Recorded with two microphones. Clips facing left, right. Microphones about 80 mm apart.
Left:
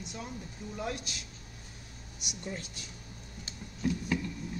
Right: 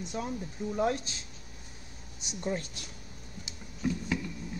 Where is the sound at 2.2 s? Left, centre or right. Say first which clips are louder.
Right 7 dB; right.